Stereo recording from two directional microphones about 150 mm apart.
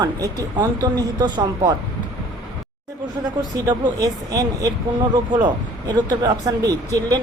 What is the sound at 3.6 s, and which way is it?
Speech, 25° right (ahead or behind).